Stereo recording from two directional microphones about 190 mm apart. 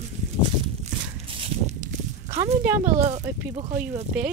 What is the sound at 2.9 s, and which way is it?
Speech, 35° right (ahead or behind).